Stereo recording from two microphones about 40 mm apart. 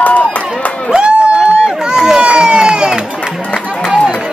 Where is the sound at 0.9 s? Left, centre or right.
Right.